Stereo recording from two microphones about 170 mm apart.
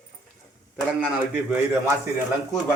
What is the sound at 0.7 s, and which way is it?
Speech, 5° right (ahead or behind).